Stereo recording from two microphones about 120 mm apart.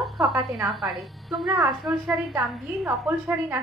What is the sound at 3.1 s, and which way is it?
Speech, 15° right (ahead or behind).